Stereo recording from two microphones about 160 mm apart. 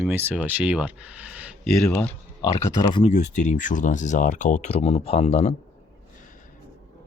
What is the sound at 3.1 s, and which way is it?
Speech, 50° left (ahead or behind).